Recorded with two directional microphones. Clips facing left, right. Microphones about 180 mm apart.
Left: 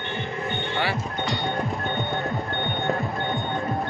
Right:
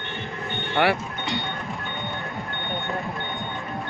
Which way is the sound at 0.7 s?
65° right (ahead or behind).